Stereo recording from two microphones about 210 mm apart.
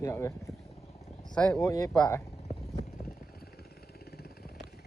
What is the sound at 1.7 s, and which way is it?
Speech, 15° left (ahead or behind).